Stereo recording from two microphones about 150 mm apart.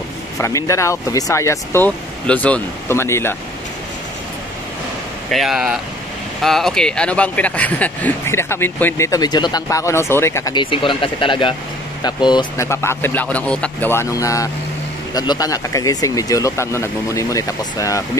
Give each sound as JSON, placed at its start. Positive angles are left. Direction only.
{"t": 0.4, "sound": "speech", "side_deg": 20}
{"t": 5.3, "sound": "speech", "side_deg": 0}
{"t": 10.5, "sound": "speech", "side_deg": 35}
{"t": 12.6, "sound": "speech", "side_deg": 15}